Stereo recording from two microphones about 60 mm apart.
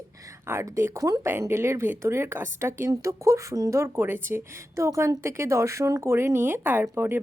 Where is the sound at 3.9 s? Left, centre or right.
Right.